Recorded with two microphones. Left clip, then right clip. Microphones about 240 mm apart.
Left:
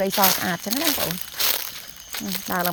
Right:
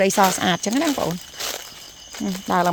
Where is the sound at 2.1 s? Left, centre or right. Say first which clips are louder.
Right 2 dB; left.